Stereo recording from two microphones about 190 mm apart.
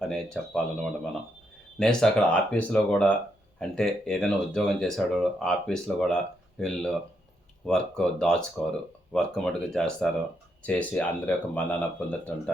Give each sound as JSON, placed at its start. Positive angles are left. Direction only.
{"t": 0.1, "sound": "speech", "side_deg": 5}